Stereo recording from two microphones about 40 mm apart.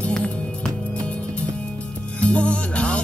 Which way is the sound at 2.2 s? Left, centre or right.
Left.